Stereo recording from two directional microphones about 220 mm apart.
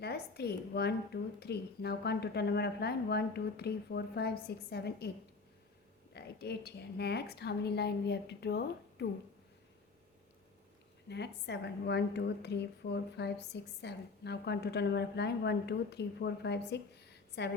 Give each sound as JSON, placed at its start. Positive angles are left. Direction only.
{"t": 0.0, "sound": "a woman's voice", "side_deg": 45}
{"t": 6.1, "sound": "a woman's voice", "side_deg": 45}
{"t": 11.1, "sound": "a woman's voice", "side_deg": 50}